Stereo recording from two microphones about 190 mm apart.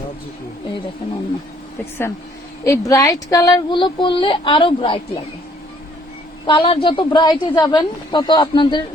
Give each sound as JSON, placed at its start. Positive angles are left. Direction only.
{"t": 1.8, "sound": "speech", "side_deg": 10}
{"t": 6.4, "sound": "speech", "side_deg": 25}